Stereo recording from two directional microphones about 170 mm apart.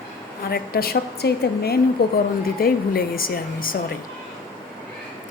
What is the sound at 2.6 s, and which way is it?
A woman's voice, 60° left (ahead or behind).